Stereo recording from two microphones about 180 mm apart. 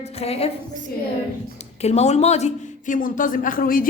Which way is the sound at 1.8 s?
35° left (ahead or behind).